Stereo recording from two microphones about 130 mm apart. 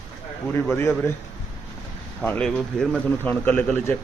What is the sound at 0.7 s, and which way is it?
Speech, 20° left (ahead or behind).